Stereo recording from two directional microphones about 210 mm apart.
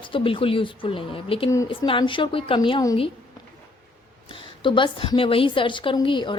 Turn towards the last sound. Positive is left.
turn(degrees=25)  # may be behind; listen again after turning